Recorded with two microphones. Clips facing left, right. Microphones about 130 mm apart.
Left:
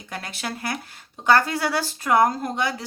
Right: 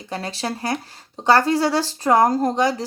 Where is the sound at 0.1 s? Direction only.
30° right (ahead or behind).